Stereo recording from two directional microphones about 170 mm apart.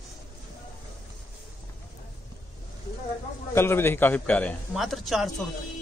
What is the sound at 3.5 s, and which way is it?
Speech, 15° left (ahead or behind).